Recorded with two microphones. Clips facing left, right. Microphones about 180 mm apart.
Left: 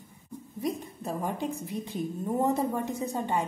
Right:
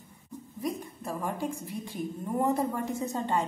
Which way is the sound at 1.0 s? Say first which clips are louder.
Left 1 dB; 20° left (ahead or behind).